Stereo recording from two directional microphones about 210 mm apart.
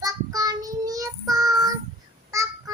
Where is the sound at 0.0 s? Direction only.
15° right (ahead or behind).